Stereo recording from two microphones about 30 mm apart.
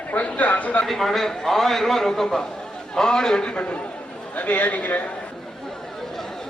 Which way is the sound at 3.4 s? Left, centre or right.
Left.